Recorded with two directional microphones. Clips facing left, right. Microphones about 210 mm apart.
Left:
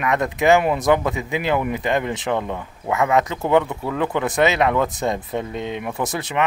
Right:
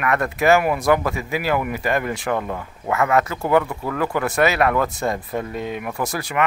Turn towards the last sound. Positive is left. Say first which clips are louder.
# left 1 dB
turn(degrees=20)  # may be behind; listen again after turning